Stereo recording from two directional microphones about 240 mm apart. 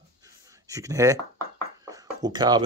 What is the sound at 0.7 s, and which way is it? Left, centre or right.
Speech, centre.